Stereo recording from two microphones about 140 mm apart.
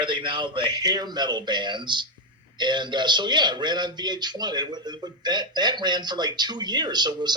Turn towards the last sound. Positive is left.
turn(degrees=-30)  # may be behind; listen again after turning